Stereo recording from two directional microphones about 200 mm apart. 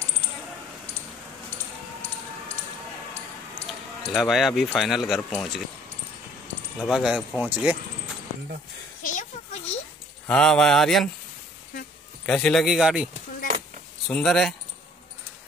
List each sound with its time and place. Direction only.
3.6 s speech: centre (ahead or behind)
6.8 s speech: 5° right (ahead or behind)
9.0 s a sound: 40° left (ahead or behind)
10.2 s speech: 5° left (ahead or behind)
12.3 s speech: centre (ahead or behind)